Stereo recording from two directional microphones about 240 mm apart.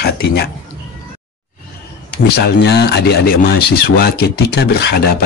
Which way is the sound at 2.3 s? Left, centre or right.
Left.